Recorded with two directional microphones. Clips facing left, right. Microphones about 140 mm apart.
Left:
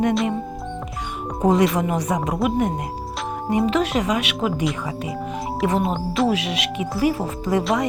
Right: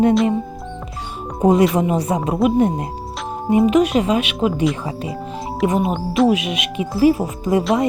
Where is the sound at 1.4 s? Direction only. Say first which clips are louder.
Right 4 dB; 20° right (ahead or behind).